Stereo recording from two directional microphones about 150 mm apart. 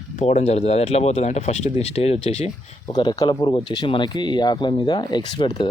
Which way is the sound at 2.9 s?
25° left (ahead or behind).